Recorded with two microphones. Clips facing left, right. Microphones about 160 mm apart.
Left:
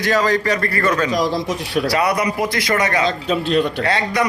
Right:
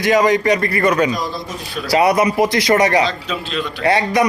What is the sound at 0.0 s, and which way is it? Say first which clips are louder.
A man's voice: right 3 dB; 15° right (ahead or behind).